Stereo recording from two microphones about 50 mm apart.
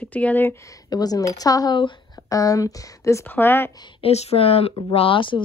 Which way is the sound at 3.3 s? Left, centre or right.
Left.